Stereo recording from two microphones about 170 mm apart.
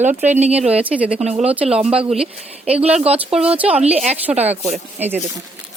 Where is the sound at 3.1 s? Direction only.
35° right (ahead or behind).